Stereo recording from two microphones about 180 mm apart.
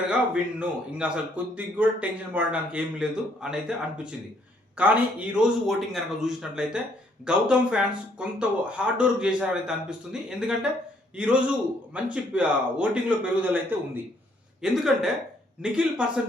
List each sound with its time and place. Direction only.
0.6 s speech: 5° right (ahead or behind)